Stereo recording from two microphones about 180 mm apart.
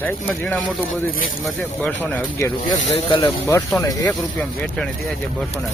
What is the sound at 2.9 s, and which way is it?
Speech, 25° left (ahead or behind).